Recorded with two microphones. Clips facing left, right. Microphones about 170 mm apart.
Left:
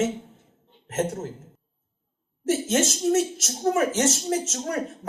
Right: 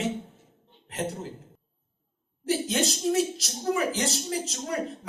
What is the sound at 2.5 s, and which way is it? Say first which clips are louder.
Speech: left 3 dB; 45° left (ahead or behind).